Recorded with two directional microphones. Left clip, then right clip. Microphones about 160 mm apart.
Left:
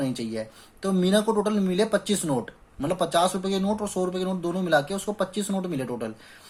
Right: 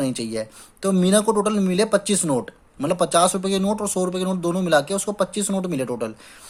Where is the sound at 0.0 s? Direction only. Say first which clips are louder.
Right 4 dB; 45° right (ahead or behind).